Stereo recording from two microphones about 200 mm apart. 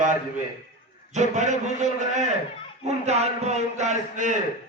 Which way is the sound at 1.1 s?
35° right (ahead or behind).